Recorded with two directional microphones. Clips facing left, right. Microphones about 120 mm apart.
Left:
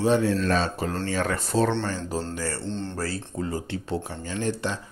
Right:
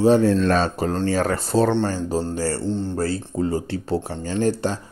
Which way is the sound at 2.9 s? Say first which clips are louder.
Right 7 dB; 25° right (ahead or behind).